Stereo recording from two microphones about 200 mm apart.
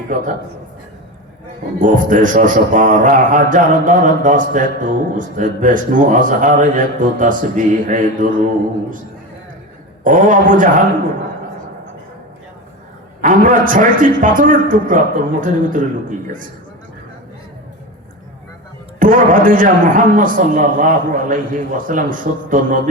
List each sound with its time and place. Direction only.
0.1 s a man's voice: 40° right (ahead or behind)
1.8 s a man's voice: 40° right (ahead or behind)
10.0 s a man's voice: 40° right (ahead or behind)
13.2 s a man's voice: 40° right (ahead or behind)
18.9 s a man's voice: 40° right (ahead or behind)